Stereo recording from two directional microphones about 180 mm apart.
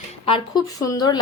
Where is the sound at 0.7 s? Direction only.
20° left (ahead or behind).